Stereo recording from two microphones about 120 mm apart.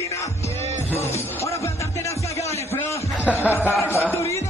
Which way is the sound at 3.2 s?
10° right (ahead or behind).